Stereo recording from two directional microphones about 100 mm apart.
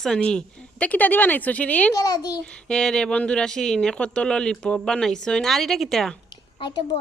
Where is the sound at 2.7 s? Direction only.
5° left (ahead or behind).